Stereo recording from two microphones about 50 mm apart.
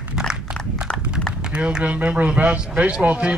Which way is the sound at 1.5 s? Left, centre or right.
Right.